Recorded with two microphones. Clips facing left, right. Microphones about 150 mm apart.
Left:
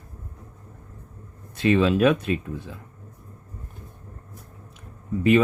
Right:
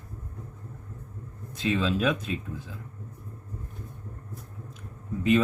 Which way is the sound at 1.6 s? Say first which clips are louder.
Left 7 dB; 65° left (ahead or behind).